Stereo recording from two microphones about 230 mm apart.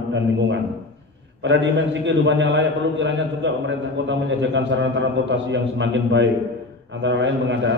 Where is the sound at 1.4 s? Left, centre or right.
Right.